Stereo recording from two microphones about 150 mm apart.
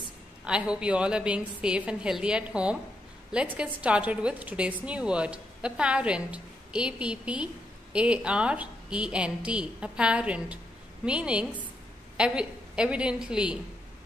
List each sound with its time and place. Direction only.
0.5 s a woman's voice: 5° right (ahead or behind)